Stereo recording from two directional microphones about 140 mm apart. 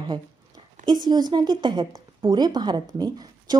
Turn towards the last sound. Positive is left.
turn(degrees=-30)  # may be behind; listen again after turning